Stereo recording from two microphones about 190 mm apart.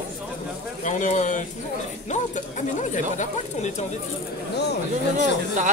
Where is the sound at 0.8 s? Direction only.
40° left (ahead or behind).